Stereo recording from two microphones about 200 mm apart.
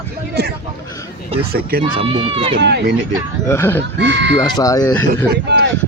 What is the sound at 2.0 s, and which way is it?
Speech, 30° right (ahead or behind).